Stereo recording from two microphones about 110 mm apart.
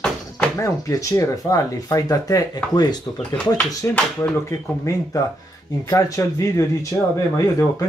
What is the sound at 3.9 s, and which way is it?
Speech, 10° left (ahead or behind).